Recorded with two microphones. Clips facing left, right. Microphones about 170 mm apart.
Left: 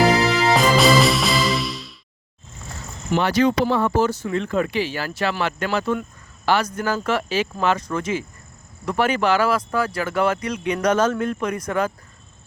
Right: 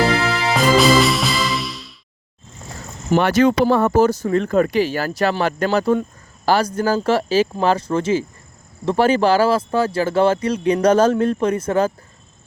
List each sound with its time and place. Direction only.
0.5 s music: centre (ahead or behind)
3.2 s speech: 55° right (ahead or behind); by 11.9 s 30° right (ahead or behind)